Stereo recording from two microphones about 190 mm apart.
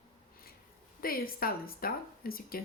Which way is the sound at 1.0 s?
50° left (ahead or behind).